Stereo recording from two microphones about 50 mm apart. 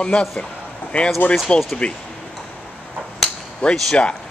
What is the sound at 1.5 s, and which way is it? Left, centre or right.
Speech, left.